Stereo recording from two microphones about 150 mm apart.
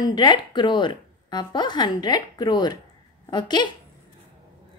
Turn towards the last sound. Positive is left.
turn(degrees=30)  # may be behind; listen again after turning